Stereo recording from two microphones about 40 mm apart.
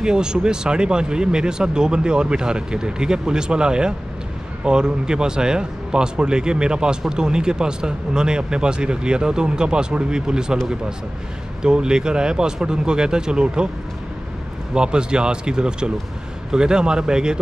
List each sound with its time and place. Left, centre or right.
0.0 s speech: centre
11.6 s speech: centre
14.7 s speech: right